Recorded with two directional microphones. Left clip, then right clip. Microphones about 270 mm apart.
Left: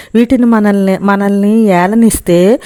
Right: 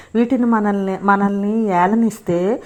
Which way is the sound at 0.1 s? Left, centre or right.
Left.